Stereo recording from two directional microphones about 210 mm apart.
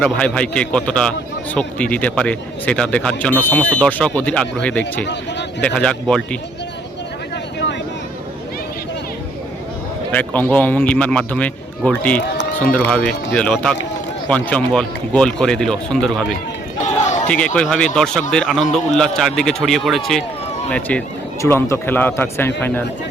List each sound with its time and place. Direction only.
0.0 s speech: 5° left (ahead or behind)
5.0 s speech: 55° left (ahead or behind)
5.6 s speech: 5° left (ahead or behind)
10.1 s a man's voice: 5° left (ahead or behind)
16.8 s a sound: 35° left (ahead or behind)
17.2 s a man's voice: 5° left (ahead or behind)